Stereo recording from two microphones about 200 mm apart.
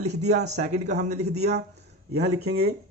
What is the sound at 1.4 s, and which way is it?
Speech, 55° right (ahead or behind).